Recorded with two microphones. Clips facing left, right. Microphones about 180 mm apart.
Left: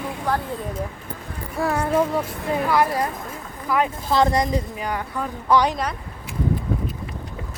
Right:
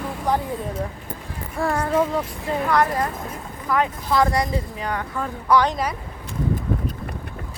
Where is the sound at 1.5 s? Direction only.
5° left (ahead or behind).